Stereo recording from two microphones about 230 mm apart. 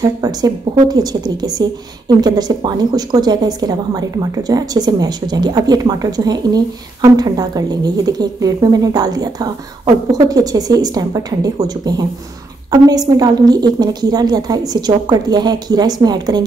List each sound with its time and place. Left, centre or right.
0.0 s a woman's voice: centre